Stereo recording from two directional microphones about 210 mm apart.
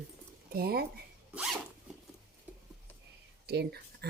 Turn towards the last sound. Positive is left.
turn(degrees=-50)  # may be behind; listen again after turning